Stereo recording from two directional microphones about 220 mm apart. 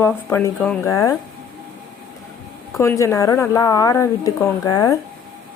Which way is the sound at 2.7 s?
15° left (ahead or behind).